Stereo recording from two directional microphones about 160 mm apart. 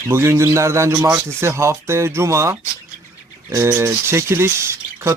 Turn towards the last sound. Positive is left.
turn(degrees=-15)  # may be behind; listen again after turning